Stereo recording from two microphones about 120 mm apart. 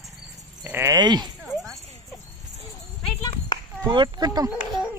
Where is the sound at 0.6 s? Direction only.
15° right (ahead or behind).